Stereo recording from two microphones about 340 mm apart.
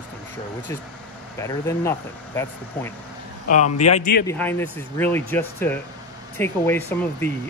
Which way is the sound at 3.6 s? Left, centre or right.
Left.